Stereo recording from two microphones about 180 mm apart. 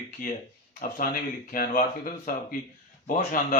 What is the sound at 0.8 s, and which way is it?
Speech, 50° left (ahead or behind).